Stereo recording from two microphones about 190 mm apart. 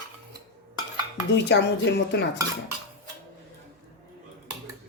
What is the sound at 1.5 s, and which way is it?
Speech, 65° left (ahead or behind).